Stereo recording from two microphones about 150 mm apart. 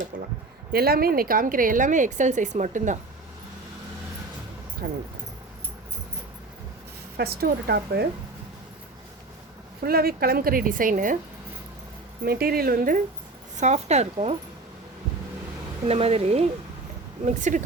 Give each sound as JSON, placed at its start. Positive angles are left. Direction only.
{"t": 0.7, "sound": "a woman's voice", "side_deg": -90}
{"t": 4.8, "sound": "speech", "side_deg": -90}
{"t": 7.2, "sound": "speech", "side_deg": -90}
{"t": 9.8, "sound": "a woman's voice", "side_deg": -90}
{"t": 12.2, "sound": "speech", "side_deg": -85}
{"t": 13.6, "sound": "speech", "side_deg": -50}
{"t": 15.9, "sound": "speech", "side_deg": -40}
{"t": 17.2, "sound": "a woman's voice", "side_deg": -55}